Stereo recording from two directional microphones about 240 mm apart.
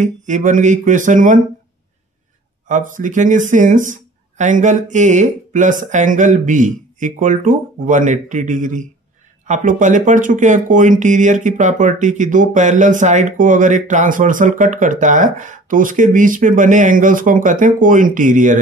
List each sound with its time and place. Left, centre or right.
0.0 s speech: right
2.7 s speech: right